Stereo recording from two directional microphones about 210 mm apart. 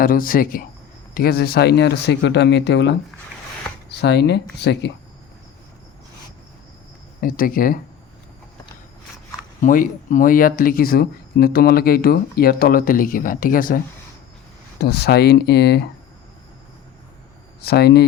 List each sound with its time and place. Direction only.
0.0 s speech: 45° left (ahead or behind)
4.0 s speech: 55° left (ahead or behind)
7.2 s speech: 40° left (ahead or behind)
9.6 s speech: 40° left (ahead or behind)
17.6 s speech: 50° left (ahead or behind)